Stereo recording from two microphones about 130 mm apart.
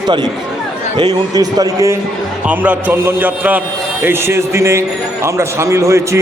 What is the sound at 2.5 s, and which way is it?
A man's voice, 10° right (ahead or behind).